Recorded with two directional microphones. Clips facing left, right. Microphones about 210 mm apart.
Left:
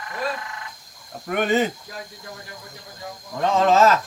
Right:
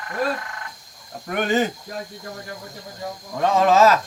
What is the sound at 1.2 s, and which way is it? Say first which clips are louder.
Speech: even; centre (ahead or behind).